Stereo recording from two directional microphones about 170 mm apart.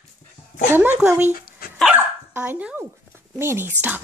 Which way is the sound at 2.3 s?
10° right (ahead or behind).